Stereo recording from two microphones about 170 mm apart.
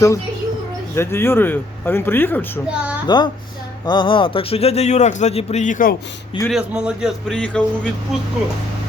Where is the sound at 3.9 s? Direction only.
30° left (ahead or behind); by 5.9 s 50° left (ahead or behind).